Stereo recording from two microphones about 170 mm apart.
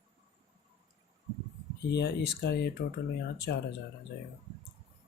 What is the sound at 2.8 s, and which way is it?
Speech, 90° left.